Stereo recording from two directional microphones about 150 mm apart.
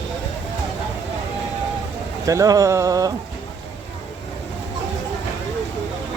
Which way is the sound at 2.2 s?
20° right (ahead or behind).